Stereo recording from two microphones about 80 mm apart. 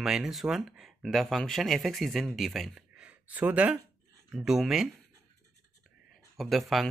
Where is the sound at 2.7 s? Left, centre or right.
Centre.